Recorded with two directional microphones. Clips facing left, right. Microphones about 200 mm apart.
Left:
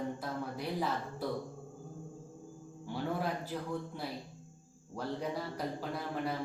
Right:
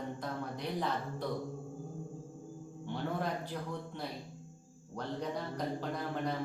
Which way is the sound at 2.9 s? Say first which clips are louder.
Left 1 dB; 5° left (ahead or behind).